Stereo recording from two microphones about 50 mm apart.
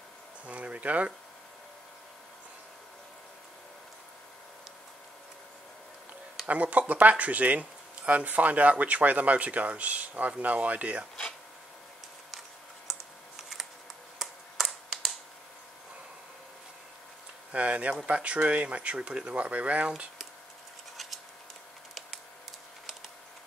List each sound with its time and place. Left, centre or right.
0.5 s speech: right
6.4 s speech: right
14.1 s computer keyboard: centre
17.5 s speech: right